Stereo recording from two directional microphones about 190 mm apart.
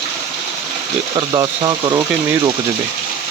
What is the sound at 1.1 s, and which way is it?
Speech, 20° right (ahead or behind).